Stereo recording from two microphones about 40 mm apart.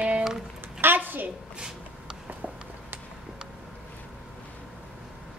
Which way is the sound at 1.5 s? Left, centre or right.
Centre.